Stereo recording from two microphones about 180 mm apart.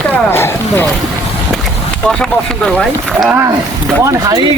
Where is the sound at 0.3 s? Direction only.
10° left (ahead or behind).